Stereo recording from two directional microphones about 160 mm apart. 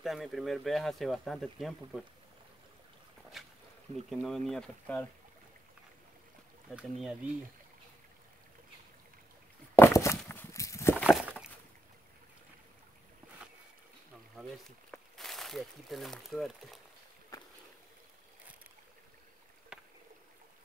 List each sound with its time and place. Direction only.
0.0 s speech: centre (ahead or behind)
3.4 s boat: centre (ahead or behind)
4.1 s speech: centre (ahead or behind)
6.7 s speech: 5° right (ahead or behind)
9.8 s walk: 15° left (ahead or behind)
11.0 s a sound: 5° right (ahead or behind)
14.3 s speech: centre (ahead or behind)